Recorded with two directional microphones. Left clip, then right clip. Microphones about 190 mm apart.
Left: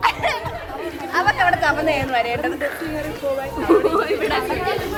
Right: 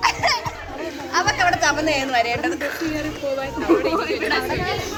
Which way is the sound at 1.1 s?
50° right (ahead or behind).